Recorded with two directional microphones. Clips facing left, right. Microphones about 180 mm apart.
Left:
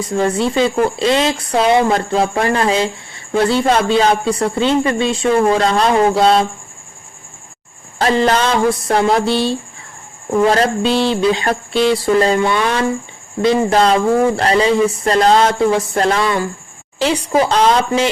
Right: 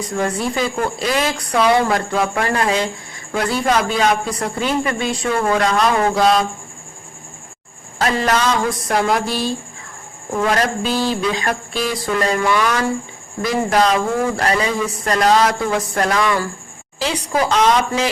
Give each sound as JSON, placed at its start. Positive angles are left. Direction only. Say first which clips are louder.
{"t": 0.0, "sound": "speech", "louder": "left 5 dB", "side_deg": 25}
{"t": 7.9, "sound": "speech", "louder": "left 4 dB", "side_deg": 30}